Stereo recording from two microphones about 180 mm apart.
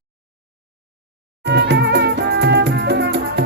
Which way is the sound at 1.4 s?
70° right (ahead or behind).